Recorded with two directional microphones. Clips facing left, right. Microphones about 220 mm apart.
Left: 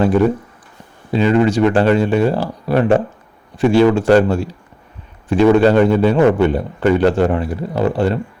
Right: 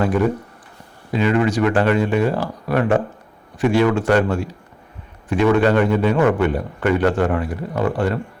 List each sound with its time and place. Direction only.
0.0 s a man's voice: 30° left (ahead or behind)